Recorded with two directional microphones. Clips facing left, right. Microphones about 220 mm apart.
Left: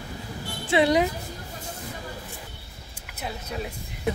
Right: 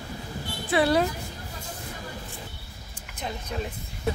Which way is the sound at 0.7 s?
20° left (ahead or behind).